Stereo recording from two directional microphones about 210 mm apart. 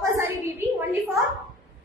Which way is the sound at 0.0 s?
10° right (ahead or behind).